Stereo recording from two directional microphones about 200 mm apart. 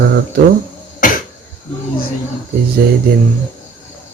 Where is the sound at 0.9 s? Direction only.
45° left (ahead or behind).